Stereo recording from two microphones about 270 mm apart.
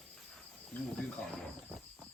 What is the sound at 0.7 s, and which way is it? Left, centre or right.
Cricket, centre.